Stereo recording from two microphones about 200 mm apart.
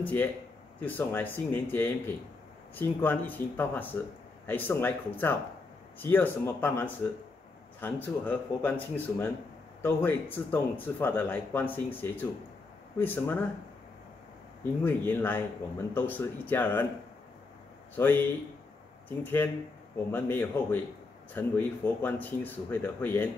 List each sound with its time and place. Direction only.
0.0 s speech: 10° left (ahead or behind)
14.6 s speech: 10° left (ahead or behind)
17.9 s speech: 10° left (ahead or behind)